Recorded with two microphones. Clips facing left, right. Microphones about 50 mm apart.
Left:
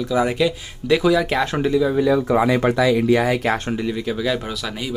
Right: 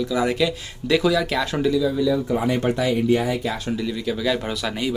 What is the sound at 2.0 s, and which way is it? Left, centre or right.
Speech, left.